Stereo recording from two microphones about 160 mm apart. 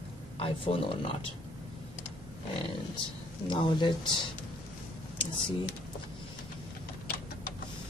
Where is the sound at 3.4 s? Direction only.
30° left (ahead or behind).